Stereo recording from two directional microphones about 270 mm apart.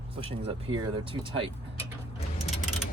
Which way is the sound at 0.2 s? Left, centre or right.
Right.